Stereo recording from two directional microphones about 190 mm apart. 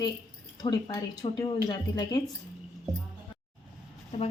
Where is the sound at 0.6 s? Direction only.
20° left (ahead or behind).